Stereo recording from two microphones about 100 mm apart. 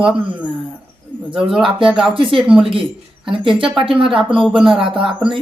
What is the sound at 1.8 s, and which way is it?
Speech, 5° right (ahead or behind).